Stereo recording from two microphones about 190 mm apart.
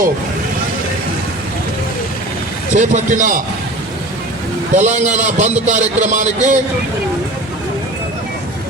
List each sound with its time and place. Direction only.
2.7 s a man's voice: 40° right (ahead or behind)
4.7 s a man's voice: 35° right (ahead or behind)